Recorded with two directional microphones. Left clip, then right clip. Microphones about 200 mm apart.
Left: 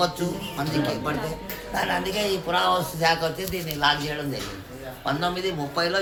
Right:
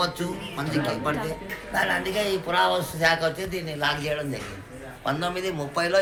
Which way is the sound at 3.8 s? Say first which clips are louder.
Left 3 dB; 50° right (ahead or behind).